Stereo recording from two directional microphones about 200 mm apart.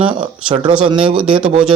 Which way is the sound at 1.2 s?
5° right (ahead or behind).